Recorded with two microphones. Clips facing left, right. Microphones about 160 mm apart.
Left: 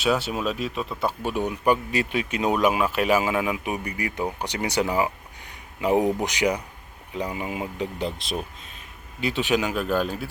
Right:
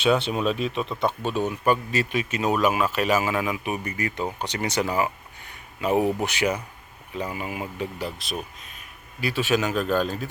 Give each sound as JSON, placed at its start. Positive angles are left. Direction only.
{"t": 0.0, "sound": "speech", "side_deg": 5}